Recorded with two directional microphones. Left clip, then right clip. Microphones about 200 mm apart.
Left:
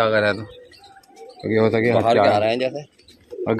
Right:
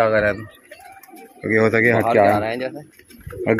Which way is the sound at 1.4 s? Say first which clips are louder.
Right 2 dB; 5° left (ahead or behind).